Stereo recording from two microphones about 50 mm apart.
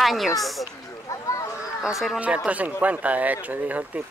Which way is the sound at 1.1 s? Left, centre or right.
Left.